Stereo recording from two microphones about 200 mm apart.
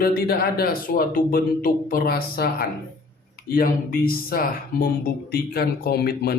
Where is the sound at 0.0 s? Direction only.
50° left (ahead or behind).